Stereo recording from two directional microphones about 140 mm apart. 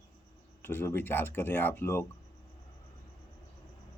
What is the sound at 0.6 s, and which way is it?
Speech, 15° left (ahead or behind).